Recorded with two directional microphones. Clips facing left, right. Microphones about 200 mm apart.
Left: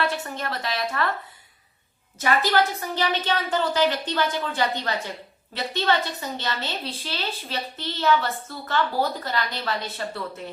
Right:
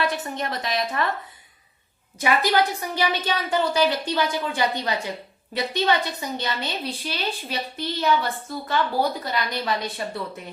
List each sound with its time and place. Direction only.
0.0 s a woman's voice: 15° right (ahead or behind)
2.1 s a woman's voice: 15° right (ahead or behind)